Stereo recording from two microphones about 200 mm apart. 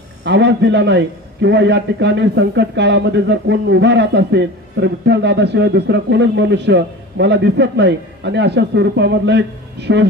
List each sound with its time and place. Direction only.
0.2 s a man's voice: 60° right (ahead or behind)